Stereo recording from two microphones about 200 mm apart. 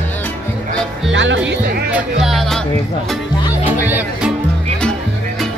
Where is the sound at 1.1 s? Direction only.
65° right (ahead or behind).